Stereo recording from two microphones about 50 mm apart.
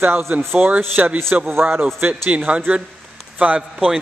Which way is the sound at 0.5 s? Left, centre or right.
Right.